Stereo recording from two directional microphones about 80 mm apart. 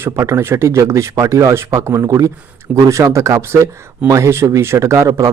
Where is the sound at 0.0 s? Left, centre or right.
Right.